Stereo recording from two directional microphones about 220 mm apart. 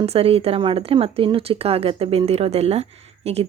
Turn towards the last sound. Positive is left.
turn(degrees=-25)  # may be behind; listen again after turning